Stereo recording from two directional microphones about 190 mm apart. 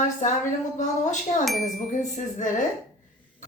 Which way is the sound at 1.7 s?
40° left (ahead or behind).